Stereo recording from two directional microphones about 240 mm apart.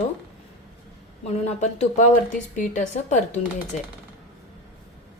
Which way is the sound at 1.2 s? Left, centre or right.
Left.